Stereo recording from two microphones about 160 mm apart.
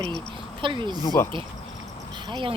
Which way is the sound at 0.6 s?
30° right (ahead or behind).